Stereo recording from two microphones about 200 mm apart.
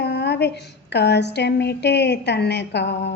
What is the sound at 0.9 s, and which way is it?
Speech, 55° left (ahead or behind).